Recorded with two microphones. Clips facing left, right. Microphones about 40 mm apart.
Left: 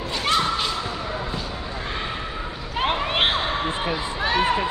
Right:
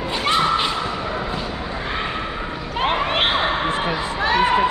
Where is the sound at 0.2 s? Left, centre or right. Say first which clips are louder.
Right 3 dB; centre.